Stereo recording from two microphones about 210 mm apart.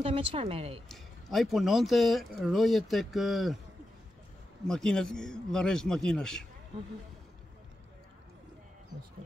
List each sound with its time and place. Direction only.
0.0 s speech: 25° right (ahead or behind)
0.8 s speech: centre (ahead or behind)
4.6 s speech: 5° left (ahead or behind)